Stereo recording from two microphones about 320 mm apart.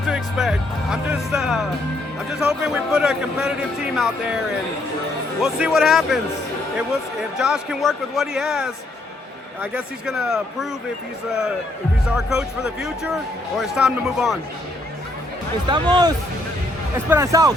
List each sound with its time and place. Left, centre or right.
0.1 s a man's voice: centre
5.4 s a man's voice: centre
7.3 s a man's voice: centre
12.0 s a man's voice: centre
15.7 s speech: centre